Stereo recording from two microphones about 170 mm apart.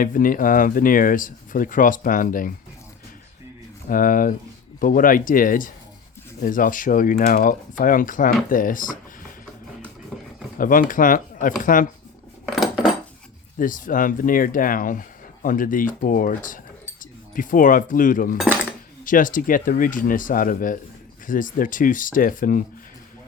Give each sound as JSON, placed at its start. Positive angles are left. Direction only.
{"t": 0.0, "sound": "speech", "side_deg": 55}
{"t": 3.8, "sound": "speech", "side_deg": 55}
{"t": 10.1, "sound": "a sound", "side_deg": 0}
{"t": 10.6, "sound": "speech", "side_deg": 55}
{"t": 13.6, "sound": "speech", "side_deg": 50}
{"t": 17.0, "sound": "cutlery", "side_deg": 50}
{"t": 19.0, "sound": "speech", "side_deg": 50}